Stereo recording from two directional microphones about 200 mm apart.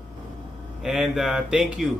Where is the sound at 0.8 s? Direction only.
Centre (ahead or behind).